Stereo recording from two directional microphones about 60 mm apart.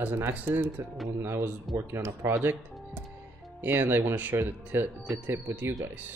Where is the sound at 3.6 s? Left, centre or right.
Right.